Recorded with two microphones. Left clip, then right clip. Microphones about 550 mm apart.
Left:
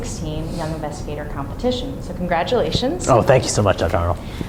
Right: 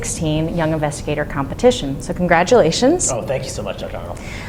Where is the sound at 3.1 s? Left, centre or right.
Left.